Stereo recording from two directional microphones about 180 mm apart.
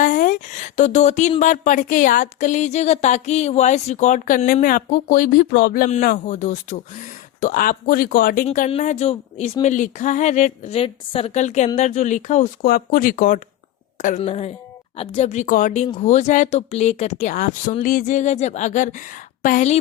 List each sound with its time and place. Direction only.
0.0 s a sound: 45° left (ahead or behind)
1.4 s speech: 45° left (ahead or behind)
8.4 s speech: 40° left (ahead or behind)